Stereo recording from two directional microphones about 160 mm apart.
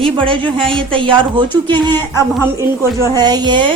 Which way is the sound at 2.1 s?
20° right (ahead or behind).